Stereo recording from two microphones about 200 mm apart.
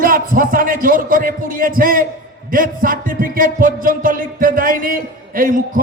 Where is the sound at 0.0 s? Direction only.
45° right (ahead or behind).